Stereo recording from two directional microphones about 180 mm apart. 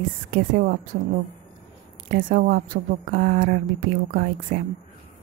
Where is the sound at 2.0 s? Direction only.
50° right (ahead or behind).